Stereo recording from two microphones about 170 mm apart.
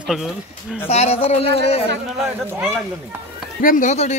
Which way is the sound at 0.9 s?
40° left (ahead or behind).